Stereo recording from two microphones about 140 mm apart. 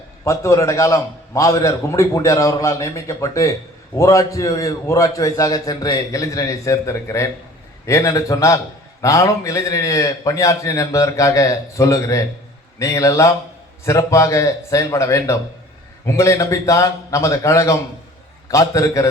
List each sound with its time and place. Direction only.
0.3 s a man's voice: 20° left (ahead or behind)